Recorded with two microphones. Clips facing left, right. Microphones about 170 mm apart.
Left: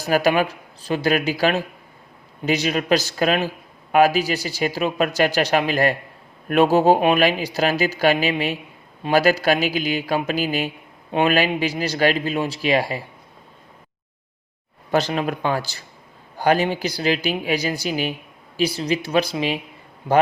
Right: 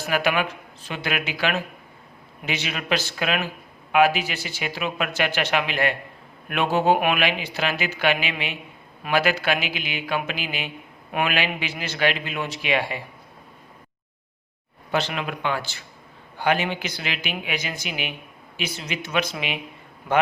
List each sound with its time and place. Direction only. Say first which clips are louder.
0.0 s speech: left 5 dB; 40° left (ahead or behind)
14.9 s a man's voice: left 5 dB; 40° left (ahead or behind)